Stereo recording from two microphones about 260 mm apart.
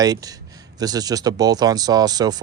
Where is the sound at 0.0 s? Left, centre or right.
Centre.